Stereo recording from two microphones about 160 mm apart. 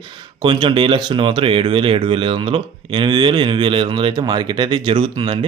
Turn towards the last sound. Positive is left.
turn(degrees=-30)  # may be behind; listen again after turning